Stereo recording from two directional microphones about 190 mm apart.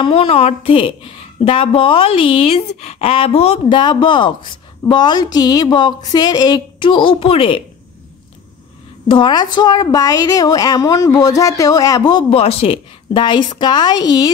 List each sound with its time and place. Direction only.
0.0 s a woman's voice: 30° left (ahead or behind)
9.0 s a woman's voice: 25° left (ahead or behind)